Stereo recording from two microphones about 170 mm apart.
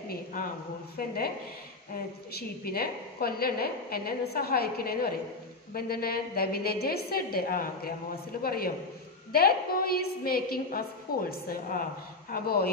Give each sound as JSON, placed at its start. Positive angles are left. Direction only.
{"t": 0.1, "sound": "a sound", "side_deg": 55}
{"t": 0.9, "sound": "a woman's voice", "side_deg": 60}
{"t": 2.3, "sound": "a woman's voice", "side_deg": 60}